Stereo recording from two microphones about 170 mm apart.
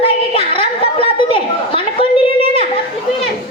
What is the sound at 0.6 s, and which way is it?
Chatter, 35° left (ahead or behind).